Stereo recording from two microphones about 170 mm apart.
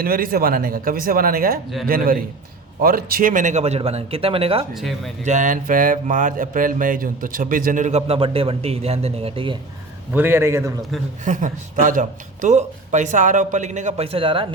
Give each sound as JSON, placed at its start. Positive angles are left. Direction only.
{"t": 0.0, "sound": "speech", "side_deg": -60}
{"t": 2.8, "sound": "speech", "side_deg": -60}
{"t": 4.7, "sound": "speech", "side_deg": 0}
{"t": 5.2, "sound": "speech", "side_deg": -45}
{"t": 10.1, "sound": "a man's voice", "side_deg": -10}
{"t": 11.3, "sound": "speech", "side_deg": -50}